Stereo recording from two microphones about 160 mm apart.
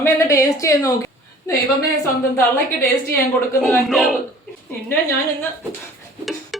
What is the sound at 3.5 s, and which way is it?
Speech, centre (ahead or behind).